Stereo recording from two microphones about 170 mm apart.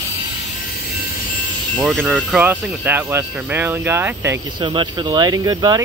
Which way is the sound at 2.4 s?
10° right (ahead or behind).